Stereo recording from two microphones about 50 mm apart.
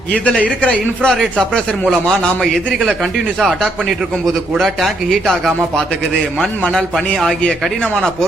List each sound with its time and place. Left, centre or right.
0.6 s a man's voice: centre
3.4 s a man's voice: centre
6.4 s a man's voice: centre